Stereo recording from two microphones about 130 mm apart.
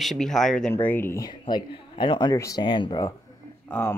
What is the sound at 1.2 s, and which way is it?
Speech, 35° left (ahead or behind).